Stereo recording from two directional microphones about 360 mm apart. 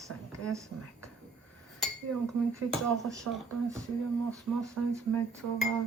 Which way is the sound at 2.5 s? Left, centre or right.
Centre.